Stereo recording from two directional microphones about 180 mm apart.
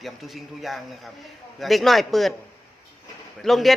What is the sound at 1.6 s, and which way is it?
Speech, centre (ahead or behind).